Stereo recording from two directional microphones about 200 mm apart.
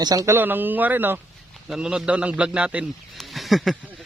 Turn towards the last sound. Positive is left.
turn(degrees=0)  # may be behind; listen again after turning